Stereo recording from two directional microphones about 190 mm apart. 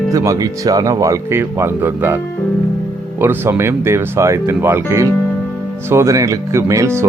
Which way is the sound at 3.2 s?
10° right (ahead or behind).